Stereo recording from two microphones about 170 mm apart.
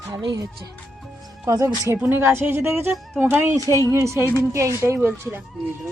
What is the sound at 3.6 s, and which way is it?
Speech, 20° left (ahead or behind).